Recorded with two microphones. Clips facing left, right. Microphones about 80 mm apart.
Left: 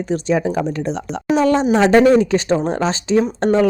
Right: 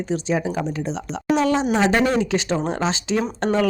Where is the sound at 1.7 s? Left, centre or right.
Left.